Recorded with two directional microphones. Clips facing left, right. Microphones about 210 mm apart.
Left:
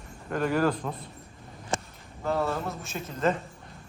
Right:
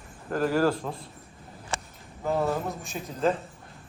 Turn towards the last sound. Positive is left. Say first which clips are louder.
# right 1 dB
turn(degrees=0)  # may be behind; listen again after turning